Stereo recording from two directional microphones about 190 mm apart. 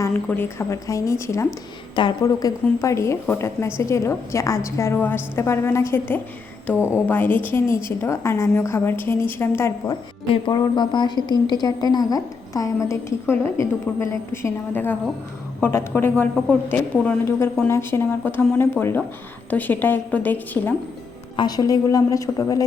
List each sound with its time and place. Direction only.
0.0 s a woman's voice: 10° left (ahead or behind)
21.3 s a woman's voice: 20° left (ahead or behind)